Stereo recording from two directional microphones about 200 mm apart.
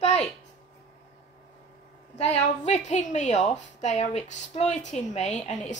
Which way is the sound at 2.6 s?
35° left (ahead or behind).